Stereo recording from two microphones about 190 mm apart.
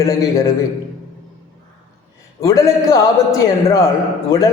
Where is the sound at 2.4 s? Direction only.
15° left (ahead or behind).